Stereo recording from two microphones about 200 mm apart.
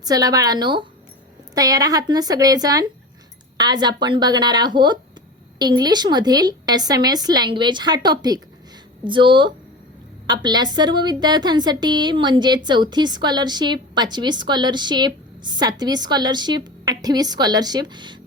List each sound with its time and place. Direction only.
0.0 s a woman's voice: 20° right (ahead or behind)